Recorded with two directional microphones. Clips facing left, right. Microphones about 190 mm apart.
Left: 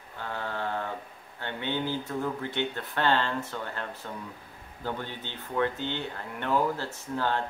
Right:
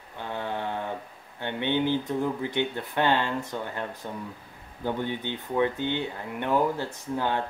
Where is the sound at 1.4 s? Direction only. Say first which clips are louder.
Right 5 dB; 20° right (ahead or behind).